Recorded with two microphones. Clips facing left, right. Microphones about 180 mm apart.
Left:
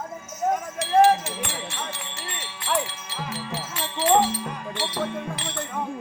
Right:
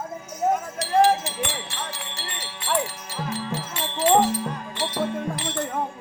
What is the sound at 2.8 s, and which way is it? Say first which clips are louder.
Wind chime: right 3 dB; 45° right (ahead or behind).